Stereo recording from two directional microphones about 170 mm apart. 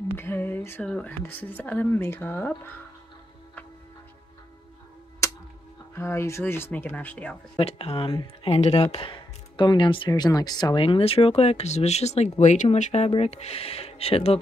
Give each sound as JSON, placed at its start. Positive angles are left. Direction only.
{"t": 0.1, "sound": "speech", "side_deg": 15}
{"t": 5.2, "sound": "a sound", "side_deg": 15}
{"t": 5.9, "sound": "speech", "side_deg": 15}
{"t": 7.5, "sound": "speech", "side_deg": 35}